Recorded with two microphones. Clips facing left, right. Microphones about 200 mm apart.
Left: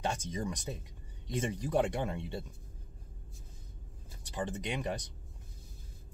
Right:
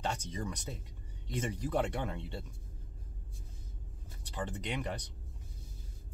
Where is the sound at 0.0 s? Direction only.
15° left (ahead or behind).